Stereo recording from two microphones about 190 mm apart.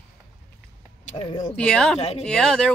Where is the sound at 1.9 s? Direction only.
35° left (ahead or behind).